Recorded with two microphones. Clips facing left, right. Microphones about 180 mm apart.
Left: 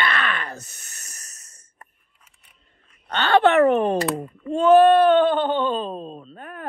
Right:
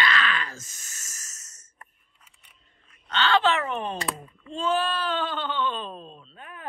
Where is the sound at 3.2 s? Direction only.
60° left (ahead or behind).